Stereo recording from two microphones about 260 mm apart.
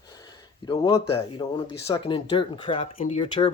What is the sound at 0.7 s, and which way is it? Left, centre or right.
Speech, centre.